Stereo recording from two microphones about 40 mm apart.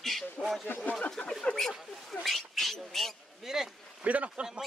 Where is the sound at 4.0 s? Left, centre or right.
Right.